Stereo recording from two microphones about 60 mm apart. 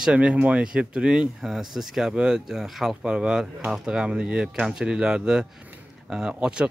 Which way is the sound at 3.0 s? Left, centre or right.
Centre.